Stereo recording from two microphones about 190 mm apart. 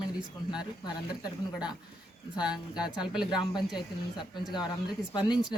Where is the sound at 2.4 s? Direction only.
5° right (ahead or behind).